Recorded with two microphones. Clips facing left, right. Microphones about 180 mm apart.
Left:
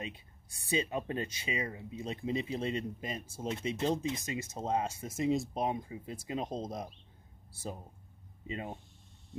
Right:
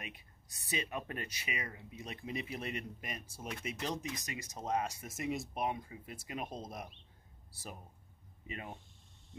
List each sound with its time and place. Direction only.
0.0 s speech: 30° left (ahead or behind)
8.5 s speech: 25° left (ahead or behind)